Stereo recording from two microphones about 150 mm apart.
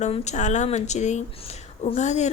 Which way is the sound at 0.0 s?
50° left (ahead or behind).